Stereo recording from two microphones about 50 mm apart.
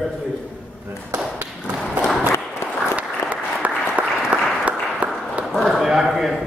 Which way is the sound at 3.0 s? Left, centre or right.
Right.